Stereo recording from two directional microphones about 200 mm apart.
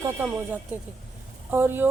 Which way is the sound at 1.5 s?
10° right (ahead or behind).